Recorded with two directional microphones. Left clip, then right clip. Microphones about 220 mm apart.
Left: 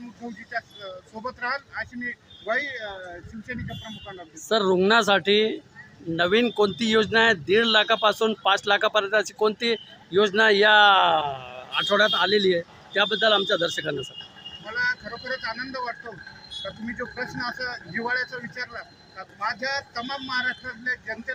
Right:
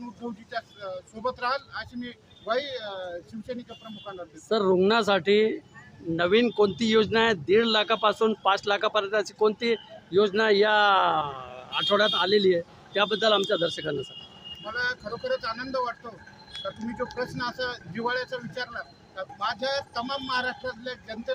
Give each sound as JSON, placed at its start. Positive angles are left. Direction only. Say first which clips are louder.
{"t": 0.5, "sound": "speech", "louder": "left 2 dB", "side_deg": 0}
{"t": 4.0, "sound": "speech", "louder": "even", "side_deg": 0}
{"t": 17.2, "sound": "speech", "louder": "left 1 dB", "side_deg": 0}